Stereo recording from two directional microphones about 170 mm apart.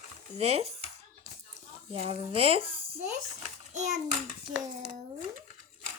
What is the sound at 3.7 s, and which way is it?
Speech, 45° right (ahead or behind).